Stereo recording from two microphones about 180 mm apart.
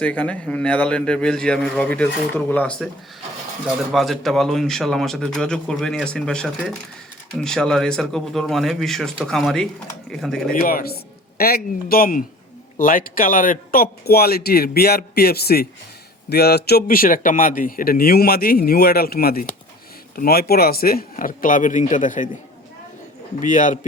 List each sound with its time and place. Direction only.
0.0 s a man's voice: 5° left (ahead or behind)
3.9 s a man's voice: centre (ahead or behind)
10.5 s speech: 50° left (ahead or behind)
23.4 s speech: 45° left (ahead or behind)